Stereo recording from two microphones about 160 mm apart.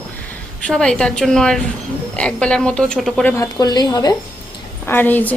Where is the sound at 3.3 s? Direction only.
20° left (ahead or behind).